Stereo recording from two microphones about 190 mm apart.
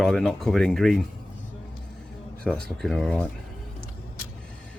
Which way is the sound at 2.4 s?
Centre (ahead or behind).